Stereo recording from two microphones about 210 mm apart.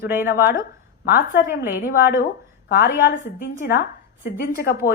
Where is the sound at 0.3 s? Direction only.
45° left (ahead or behind).